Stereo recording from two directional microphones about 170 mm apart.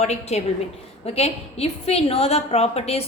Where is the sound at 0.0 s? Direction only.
40° left (ahead or behind).